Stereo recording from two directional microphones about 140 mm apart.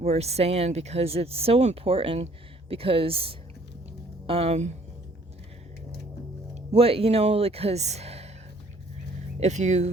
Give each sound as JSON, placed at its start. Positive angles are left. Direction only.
{"t": 0.0, "sound": "speech", "side_deg": -50}
{"t": 6.5, "sound": "speech", "side_deg": -45}
{"t": 9.4, "sound": "speech", "side_deg": -55}